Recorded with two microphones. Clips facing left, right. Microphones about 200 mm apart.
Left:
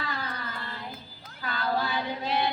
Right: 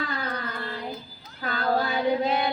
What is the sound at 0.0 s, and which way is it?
Carnatic music, 45° right (ahead or behind).